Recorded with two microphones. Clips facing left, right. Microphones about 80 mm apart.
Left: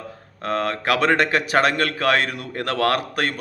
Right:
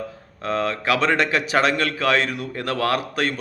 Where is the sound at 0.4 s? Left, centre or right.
Left.